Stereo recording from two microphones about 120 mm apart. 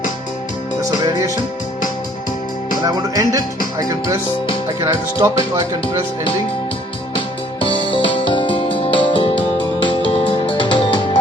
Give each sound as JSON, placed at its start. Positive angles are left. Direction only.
{"t": 0.8, "sound": "music", "side_deg": -30}
{"t": 2.8, "sound": "music", "side_deg": -30}
{"t": 7.2, "sound": "music", "side_deg": 45}